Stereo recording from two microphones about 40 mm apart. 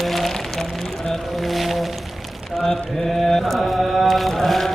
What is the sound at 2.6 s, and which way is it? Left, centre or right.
Mantra, centre.